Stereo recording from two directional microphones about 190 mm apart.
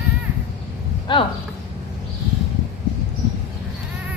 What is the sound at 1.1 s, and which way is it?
Speech, 25° left (ahead or behind).